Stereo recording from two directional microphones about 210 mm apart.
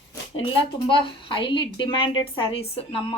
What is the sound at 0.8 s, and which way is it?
A woman's voice, 25° left (ahead or behind).